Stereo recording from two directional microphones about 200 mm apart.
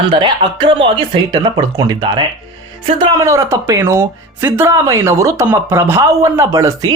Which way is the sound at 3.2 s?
15° right (ahead or behind).